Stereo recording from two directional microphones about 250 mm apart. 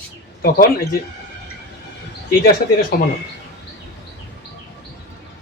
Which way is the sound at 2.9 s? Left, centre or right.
Left.